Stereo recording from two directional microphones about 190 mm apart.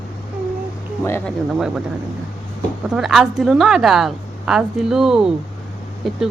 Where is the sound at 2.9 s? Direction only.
Centre (ahead or behind).